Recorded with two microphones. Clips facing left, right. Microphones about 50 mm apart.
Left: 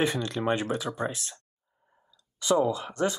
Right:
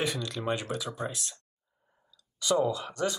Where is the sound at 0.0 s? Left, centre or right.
Left.